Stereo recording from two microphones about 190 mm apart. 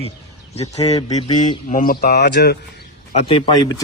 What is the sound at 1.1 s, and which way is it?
Speech, 40° left (ahead or behind).